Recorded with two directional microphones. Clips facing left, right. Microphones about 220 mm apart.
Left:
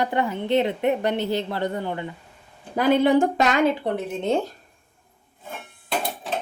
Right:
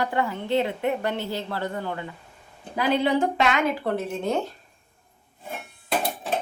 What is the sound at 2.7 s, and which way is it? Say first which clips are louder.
Speech: left 5 dB; 50° left (ahead or behind).